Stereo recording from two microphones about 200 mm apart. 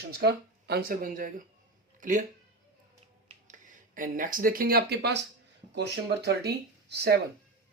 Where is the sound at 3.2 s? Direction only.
40° right (ahead or behind).